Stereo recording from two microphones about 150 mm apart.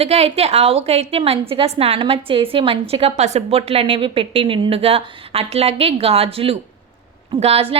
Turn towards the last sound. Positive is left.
turn(degrees=-40)  # may be behind; listen again after turning